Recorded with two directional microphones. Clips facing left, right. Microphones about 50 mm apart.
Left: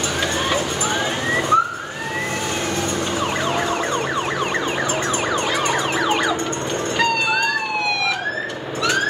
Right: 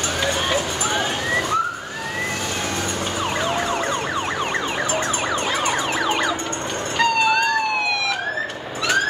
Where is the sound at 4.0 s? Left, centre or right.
Centre.